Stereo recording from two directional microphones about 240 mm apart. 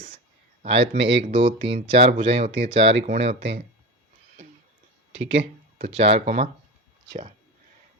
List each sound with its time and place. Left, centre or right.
0.8 s speech: right
5.3 s speech: right